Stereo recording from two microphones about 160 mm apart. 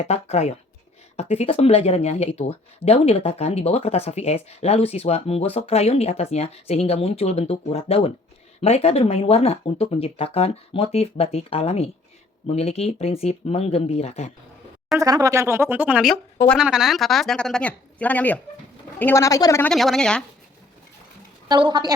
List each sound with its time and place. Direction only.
0.0 s speech: 40° left (ahead or behind)
14.9 s a woman's voice: 20° right (ahead or behind); by 19.6 s 20° left (ahead or behind)
19.6 s speech: centre (ahead or behind)
21.4 s a woman's voice: 25° right (ahead or behind)